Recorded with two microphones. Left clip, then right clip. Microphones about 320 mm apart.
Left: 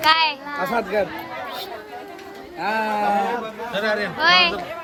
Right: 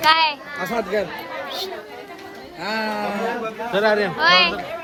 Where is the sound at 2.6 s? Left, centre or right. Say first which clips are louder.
Left 2 dB; centre.